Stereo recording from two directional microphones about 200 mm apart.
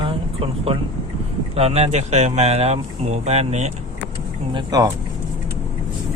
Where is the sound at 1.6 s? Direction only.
30° right (ahead or behind).